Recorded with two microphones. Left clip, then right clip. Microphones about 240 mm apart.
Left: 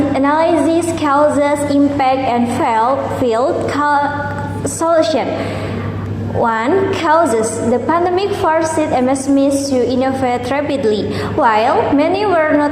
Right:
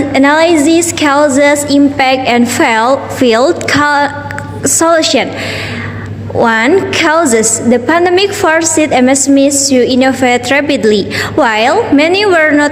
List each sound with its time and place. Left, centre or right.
0.1 s a woman's voice: right
6.4 s a woman's voice: right